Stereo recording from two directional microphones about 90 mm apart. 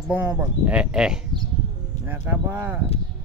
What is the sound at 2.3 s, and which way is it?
Speech, 20° right (ahead or behind).